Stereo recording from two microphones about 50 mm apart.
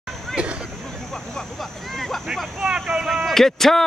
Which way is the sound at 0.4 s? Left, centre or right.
Right.